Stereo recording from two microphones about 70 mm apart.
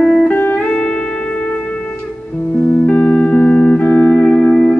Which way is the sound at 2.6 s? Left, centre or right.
Left.